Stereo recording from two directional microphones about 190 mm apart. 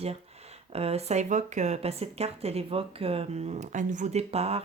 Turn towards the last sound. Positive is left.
turn(degrees=-35)  # may be behind; listen again after turning